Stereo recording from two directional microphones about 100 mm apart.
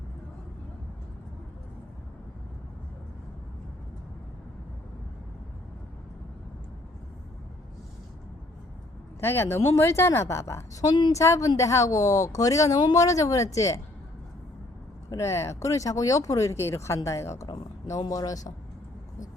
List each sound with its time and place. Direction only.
9.2 s a woman's voice: 25° left (ahead or behind)
15.1 s a woman's voice: 30° left (ahead or behind)